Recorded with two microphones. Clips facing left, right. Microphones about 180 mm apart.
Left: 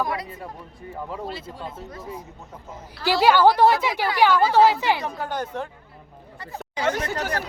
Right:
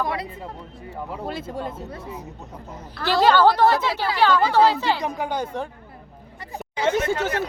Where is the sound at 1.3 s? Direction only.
50° right (ahead or behind).